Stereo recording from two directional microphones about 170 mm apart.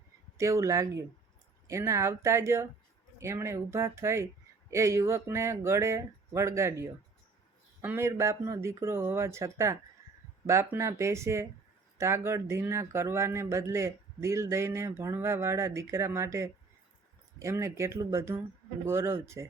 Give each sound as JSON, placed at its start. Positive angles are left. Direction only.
{"t": 0.3, "sound": "a man's voice", "side_deg": -15}